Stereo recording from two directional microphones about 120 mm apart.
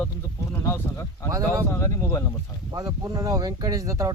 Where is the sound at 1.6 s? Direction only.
25° left (ahead or behind).